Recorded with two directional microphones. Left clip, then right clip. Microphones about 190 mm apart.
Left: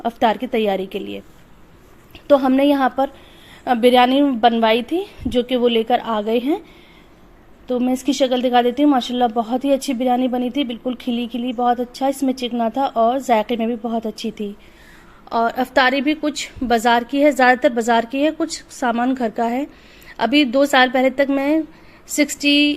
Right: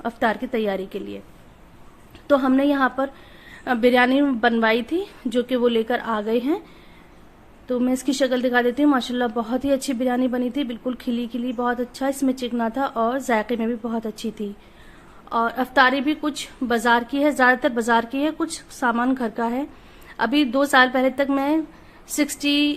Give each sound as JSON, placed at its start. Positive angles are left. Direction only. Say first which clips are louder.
{"t": 0.0, "sound": "a woman's voice", "louder": "left 5 dB", "side_deg": 10}
{"t": 2.2, "sound": "a woman's voice", "louder": "left 4 dB", "side_deg": 15}
{"t": 7.7, "sound": "a woman's voice", "louder": "left 3 dB", "side_deg": 5}
{"t": 15.3, "sound": "a woman's voice", "louder": "left 4 dB", "side_deg": 15}